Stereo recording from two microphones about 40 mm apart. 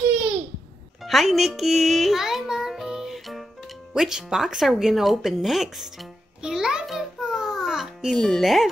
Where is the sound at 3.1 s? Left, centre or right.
Centre.